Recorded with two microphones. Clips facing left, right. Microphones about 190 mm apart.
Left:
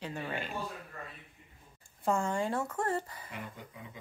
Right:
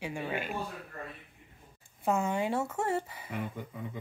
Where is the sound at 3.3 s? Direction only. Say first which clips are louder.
Right 7 dB; 55° right (ahead or behind).